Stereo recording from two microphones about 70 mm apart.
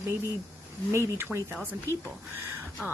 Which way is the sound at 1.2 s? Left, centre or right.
Right.